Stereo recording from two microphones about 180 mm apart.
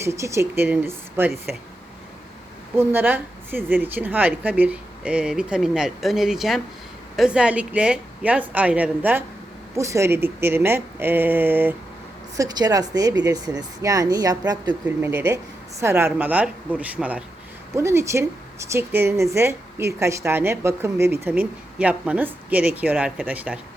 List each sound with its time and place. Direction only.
0.0 s a woman's voice: 15° right (ahead or behind)
2.7 s a woman's voice: 10° right (ahead or behind)
15.1 s a woman's voice: 10° right (ahead or behind)